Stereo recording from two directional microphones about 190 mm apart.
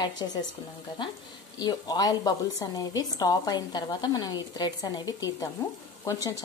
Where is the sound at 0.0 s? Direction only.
20° left (ahead or behind).